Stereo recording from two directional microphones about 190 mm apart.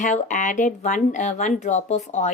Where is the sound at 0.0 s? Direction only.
40° left (ahead or behind).